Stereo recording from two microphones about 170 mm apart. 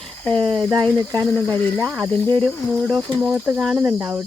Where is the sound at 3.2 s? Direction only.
5° right (ahead or behind).